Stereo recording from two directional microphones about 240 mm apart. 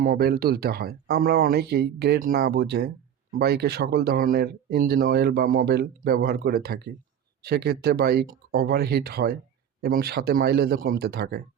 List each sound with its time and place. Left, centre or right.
0.0 s speech: right